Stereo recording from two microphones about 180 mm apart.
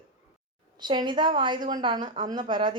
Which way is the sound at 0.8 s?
25° right (ahead or behind).